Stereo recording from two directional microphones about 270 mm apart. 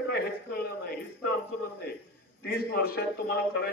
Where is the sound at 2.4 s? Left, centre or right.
Left.